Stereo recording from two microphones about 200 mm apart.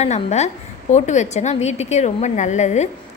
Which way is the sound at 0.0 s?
35° left (ahead or behind).